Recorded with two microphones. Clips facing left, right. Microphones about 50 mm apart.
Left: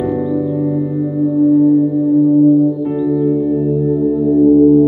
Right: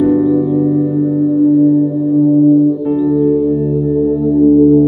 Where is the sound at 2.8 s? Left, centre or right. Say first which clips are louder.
Right 3 dB; centre.